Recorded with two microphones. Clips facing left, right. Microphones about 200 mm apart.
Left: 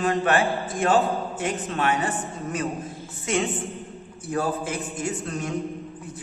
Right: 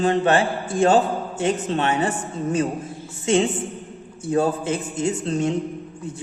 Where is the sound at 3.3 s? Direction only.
30° right (ahead or behind).